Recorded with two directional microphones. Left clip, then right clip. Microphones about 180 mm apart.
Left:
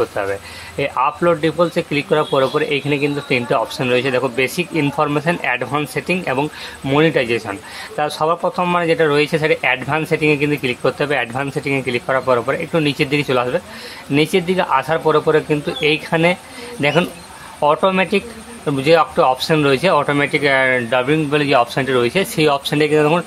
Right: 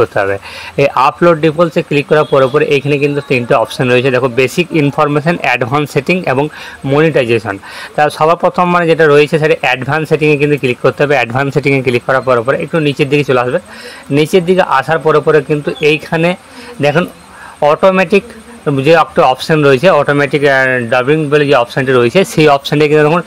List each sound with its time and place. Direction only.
0.0 s speech: 30° right (ahead or behind)